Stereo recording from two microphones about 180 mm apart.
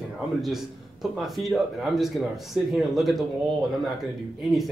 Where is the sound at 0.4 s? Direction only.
Centre (ahead or behind).